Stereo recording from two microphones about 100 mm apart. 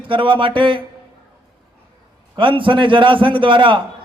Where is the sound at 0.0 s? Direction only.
60° right (ahead or behind).